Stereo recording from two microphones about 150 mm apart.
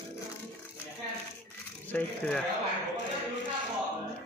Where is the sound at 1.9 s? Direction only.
10° left (ahead or behind).